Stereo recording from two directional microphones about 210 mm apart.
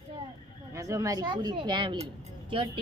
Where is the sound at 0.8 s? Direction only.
15° right (ahead or behind).